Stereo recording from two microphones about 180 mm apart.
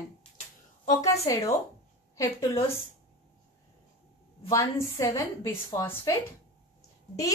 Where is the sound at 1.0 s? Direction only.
20° left (ahead or behind).